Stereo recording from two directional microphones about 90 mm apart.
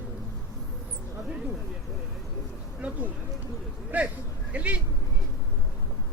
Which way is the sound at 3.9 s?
20° right (ahead or behind).